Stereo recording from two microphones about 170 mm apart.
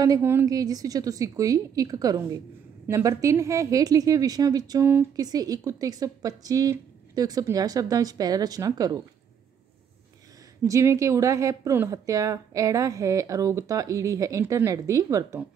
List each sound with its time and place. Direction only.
0.0 s a woman's voice: 20° right (ahead or behind)
10.6 s a woman's voice: 15° right (ahead or behind)